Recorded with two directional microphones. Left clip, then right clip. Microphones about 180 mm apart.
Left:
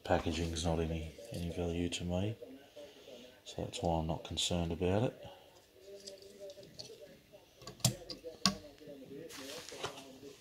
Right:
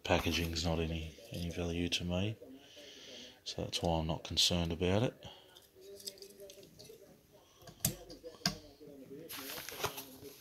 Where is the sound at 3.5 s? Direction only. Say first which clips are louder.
Right 1 dB; 20° right (ahead or behind).